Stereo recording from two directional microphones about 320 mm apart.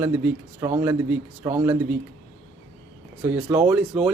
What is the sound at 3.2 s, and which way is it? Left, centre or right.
Speech, centre.